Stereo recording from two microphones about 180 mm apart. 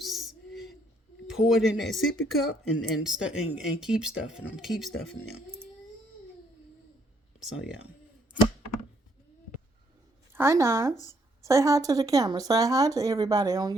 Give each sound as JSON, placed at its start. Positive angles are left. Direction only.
{"t": 0.0, "sound": "a sound", "side_deg": 0}
{"t": 1.3, "sound": "speech", "side_deg": 0}
{"t": 7.5, "sound": "speech", "side_deg": -5}
{"t": 10.3, "sound": "speech", "side_deg": -15}